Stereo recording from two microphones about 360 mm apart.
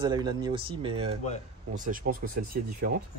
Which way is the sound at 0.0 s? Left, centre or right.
Centre.